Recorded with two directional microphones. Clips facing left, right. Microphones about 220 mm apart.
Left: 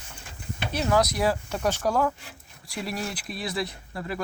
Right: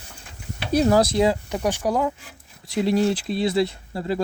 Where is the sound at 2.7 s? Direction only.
25° right (ahead or behind).